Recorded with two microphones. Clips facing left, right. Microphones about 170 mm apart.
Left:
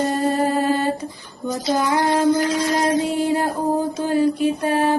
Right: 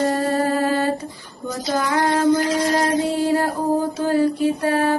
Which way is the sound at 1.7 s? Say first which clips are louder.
Left 1 dB; 20° left (ahead or behind).